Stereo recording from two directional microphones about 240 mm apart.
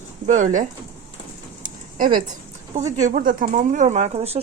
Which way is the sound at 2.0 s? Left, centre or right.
Right.